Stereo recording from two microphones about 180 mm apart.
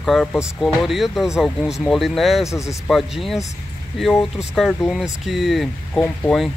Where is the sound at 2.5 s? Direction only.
15° left (ahead or behind).